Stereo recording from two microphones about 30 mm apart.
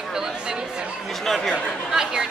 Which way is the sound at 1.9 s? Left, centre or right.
Right.